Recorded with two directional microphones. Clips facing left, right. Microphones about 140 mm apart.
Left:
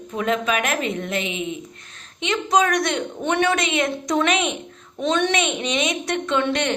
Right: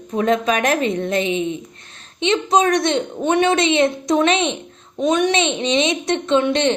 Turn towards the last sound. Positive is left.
turn(degrees=-25)  # may be behind; listen again after turning